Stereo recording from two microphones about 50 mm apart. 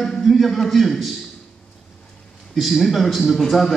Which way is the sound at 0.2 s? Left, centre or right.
Centre.